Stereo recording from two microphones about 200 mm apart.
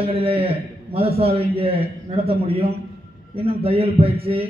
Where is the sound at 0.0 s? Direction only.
30° right (ahead or behind).